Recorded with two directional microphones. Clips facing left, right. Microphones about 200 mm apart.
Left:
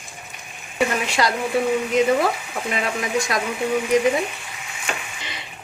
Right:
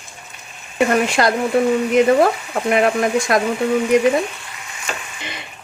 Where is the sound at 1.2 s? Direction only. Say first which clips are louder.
Right 2 dB; 55° right (ahead or behind).